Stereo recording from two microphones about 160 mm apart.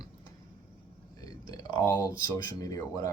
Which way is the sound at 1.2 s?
25° left (ahead or behind).